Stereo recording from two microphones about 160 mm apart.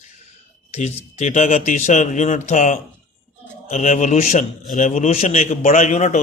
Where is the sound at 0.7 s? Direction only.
45° left (ahead or behind).